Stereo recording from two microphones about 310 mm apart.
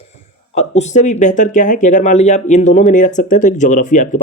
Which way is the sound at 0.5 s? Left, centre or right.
Left.